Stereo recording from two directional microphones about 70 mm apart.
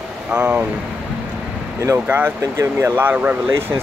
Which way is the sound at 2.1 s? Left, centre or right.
Right.